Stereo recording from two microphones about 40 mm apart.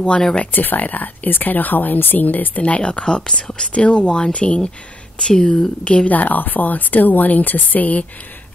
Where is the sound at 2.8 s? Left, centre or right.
Left.